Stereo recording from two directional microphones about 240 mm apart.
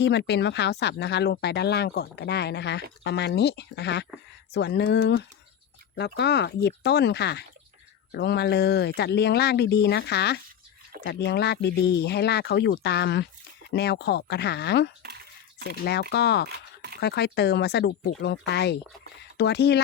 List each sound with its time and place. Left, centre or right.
0.0 s speech: left
16.5 s a sound: right
17.0 s speech: left